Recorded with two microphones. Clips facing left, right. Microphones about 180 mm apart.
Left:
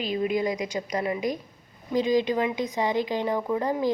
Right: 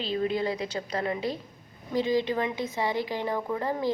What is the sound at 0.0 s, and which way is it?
A woman's voice, 15° left (ahead or behind).